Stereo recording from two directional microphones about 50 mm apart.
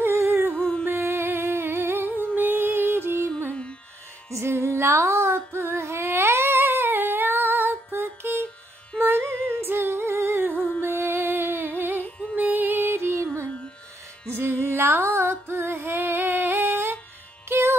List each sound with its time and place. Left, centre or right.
0.0 s humming: right
0.6 s a sound: centre
0.8 s music: right
4.3 s female singing: right
9.0 s music: right
14.3 s music: right